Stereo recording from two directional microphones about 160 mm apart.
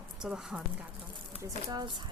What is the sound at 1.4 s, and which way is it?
Speech, 25° right (ahead or behind).